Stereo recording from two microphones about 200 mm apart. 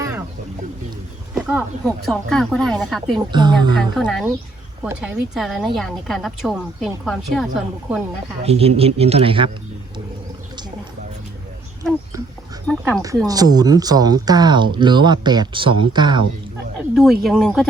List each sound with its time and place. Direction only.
0.0 s a sound: 15° right (ahead or behind)
1.5 s a woman's voice: centre (ahead or behind)
3.3 s speech: 20° right (ahead or behind)
3.9 s a woman's voice: centre (ahead or behind)
8.4 s speech: 30° right (ahead or behind)
13.0 s speech: 20° right (ahead or behind)
16.9 s a woman's voice: centre (ahead or behind)